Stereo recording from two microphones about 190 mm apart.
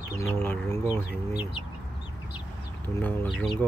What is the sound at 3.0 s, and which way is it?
Speech, 10° left (ahead or behind).